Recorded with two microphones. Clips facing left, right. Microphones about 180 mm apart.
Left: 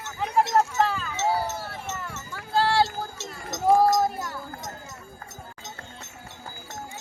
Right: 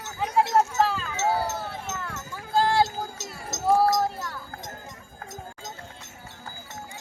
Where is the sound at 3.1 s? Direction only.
45° right (ahead or behind).